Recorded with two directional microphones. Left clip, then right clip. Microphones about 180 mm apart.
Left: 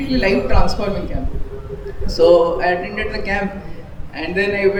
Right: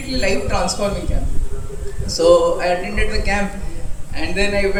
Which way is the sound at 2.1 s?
35° left (ahead or behind).